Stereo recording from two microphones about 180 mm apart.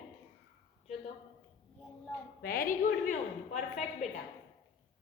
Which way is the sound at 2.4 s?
55° left (ahead or behind).